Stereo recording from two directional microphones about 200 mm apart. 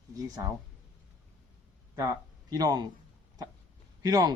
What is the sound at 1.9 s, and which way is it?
Speech, 15° right (ahead or behind).